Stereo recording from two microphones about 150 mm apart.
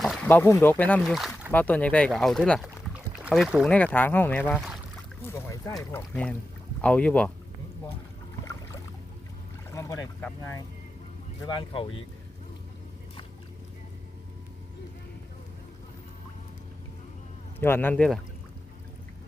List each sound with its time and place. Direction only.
0.0 s a sound: centre (ahead or behind)
0.3 s speech: 15° left (ahead or behind)
1.0 s speech: centre (ahead or behind)
1.5 s speech: 10° left (ahead or behind)
6.8 s speech: 10° left (ahead or behind)
9.6 s boat: 20° left (ahead or behind)
11.4 s speech: 35° left (ahead or behind)
17.6 s speech: 15° left (ahead or behind)